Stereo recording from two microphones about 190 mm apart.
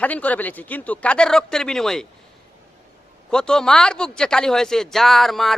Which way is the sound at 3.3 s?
5° left (ahead or behind).